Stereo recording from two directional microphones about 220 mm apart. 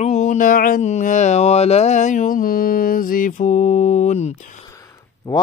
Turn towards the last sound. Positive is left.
turn(degrees=30)  # may be behind; listen again after turning